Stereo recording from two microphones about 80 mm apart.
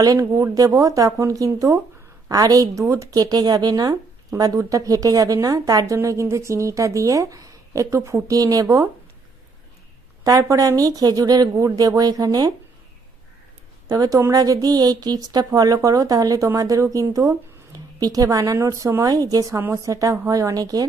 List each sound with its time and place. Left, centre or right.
0.0 s speech: right
6.0 s speech: right
10.2 s speech: right
13.9 s speech: right
18.5 s speech: right
19.0 s speech: right